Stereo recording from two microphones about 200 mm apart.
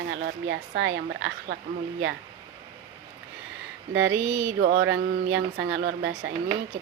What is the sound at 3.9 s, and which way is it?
Speech, 70° right (ahead or behind).